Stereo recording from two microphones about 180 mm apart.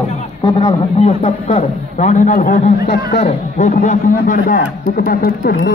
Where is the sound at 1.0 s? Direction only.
35° left (ahead or behind); by 3.0 s 50° left (ahead or behind).